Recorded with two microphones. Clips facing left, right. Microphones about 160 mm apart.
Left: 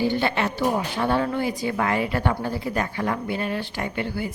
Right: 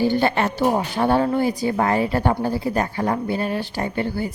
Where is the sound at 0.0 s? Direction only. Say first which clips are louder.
Right 4 dB; 40° right (ahead or behind).